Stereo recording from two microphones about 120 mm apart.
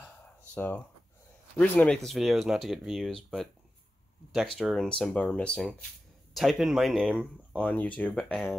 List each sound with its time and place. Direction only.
0.6 s speech: 15° left (ahead or behind)
4.6 s speech: centre (ahead or behind)
6.3 s speech: centre (ahead or behind)